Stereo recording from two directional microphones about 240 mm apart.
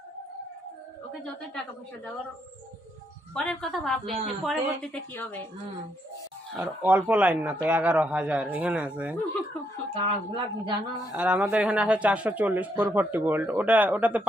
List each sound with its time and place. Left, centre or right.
1.2 s a man's voice: centre
3.3 s a man's voice: centre
6.6 s a man's voice: centre
9.9 s speech: right
11.1 s speech: centre